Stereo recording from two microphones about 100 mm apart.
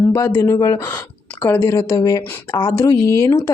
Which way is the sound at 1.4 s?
25° left (ahead or behind).